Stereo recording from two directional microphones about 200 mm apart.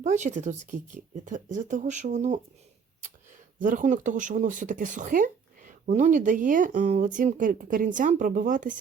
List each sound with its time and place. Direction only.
0.0 s speech: 35° right (ahead or behind)
3.6 s speech: 40° right (ahead or behind)